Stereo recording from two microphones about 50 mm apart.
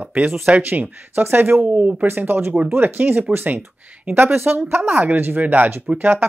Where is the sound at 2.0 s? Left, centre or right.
Right.